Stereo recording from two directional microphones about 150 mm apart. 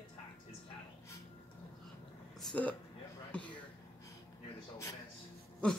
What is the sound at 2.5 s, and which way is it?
Speech, 10° left (ahead or behind).